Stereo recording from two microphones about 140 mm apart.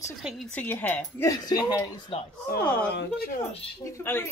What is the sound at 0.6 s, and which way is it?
Speech, 15° left (ahead or behind).